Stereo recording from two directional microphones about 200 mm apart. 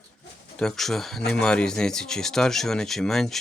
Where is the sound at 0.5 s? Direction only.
Centre (ahead or behind).